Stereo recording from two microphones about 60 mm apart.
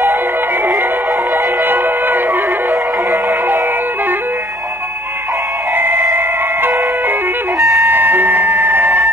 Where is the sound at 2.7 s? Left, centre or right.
Centre.